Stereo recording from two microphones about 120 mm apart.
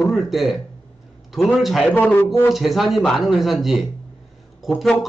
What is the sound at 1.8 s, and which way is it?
Speech, 15° left (ahead or behind).